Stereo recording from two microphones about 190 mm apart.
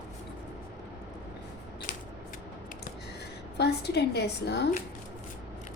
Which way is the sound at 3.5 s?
60° left (ahead or behind).